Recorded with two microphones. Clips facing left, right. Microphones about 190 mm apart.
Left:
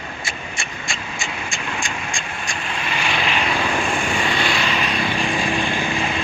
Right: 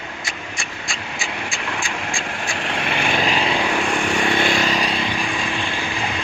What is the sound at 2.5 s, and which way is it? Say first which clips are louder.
Vehicle: right 3 dB; 70° right (ahead or behind).